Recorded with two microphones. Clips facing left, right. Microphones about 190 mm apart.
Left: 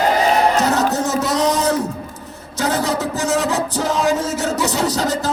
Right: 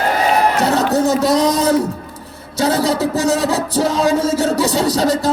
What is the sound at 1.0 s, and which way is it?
Speech, 35° right (ahead or behind).